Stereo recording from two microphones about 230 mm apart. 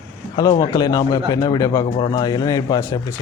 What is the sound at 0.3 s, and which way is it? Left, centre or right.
Speech, centre.